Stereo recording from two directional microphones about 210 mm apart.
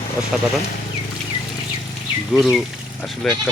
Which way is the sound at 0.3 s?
Centre (ahead or behind).